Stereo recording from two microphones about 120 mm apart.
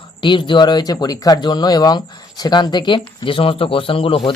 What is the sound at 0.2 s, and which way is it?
A man's voice, 45° left (ahead or behind).